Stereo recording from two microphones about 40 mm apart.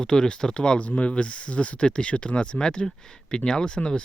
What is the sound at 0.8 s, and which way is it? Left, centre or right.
Speech, left.